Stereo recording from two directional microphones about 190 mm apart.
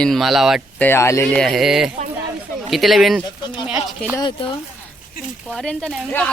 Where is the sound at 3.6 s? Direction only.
5° right (ahead or behind).